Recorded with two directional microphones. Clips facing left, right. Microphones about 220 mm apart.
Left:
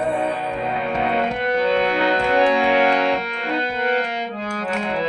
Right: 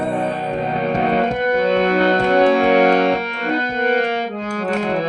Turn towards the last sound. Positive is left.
turn(degrees=-40)  # may be behind; listen again after turning